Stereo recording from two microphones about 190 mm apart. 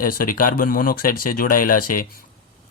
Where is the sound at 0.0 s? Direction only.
45° left (ahead or behind).